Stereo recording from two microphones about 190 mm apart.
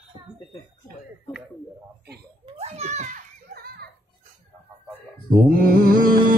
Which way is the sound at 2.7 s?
35° right (ahead or behind).